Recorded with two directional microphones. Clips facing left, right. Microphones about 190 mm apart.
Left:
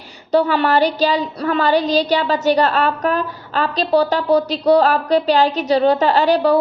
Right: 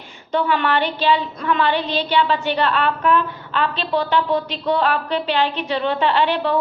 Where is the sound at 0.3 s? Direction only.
40° left (ahead or behind).